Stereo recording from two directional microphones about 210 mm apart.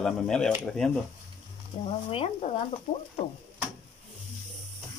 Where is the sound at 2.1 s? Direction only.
25° left (ahead or behind).